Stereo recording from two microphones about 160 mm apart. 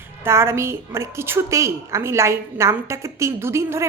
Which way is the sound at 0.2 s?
15° right (ahead or behind).